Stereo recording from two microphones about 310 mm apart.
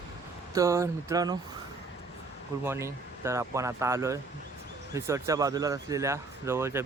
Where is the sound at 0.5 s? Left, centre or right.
Centre.